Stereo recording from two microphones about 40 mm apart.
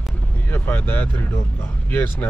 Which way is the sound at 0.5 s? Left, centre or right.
Left.